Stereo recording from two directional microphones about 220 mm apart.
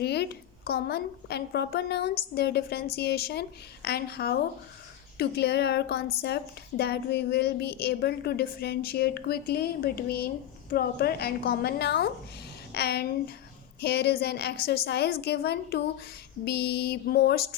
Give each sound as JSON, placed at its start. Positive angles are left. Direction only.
{"t": 0.0, "sound": "a woman's voice", "side_deg": 45}